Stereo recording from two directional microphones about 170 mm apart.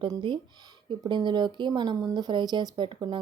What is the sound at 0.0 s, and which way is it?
A woman's voice, 30° right (ahead or behind).